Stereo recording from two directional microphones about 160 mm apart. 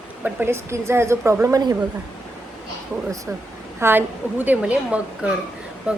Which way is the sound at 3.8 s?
10° right (ahead or behind).